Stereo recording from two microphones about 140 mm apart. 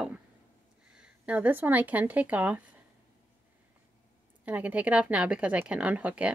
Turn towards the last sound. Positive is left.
turn(degrees=-10)  # may be behind; listen again after turning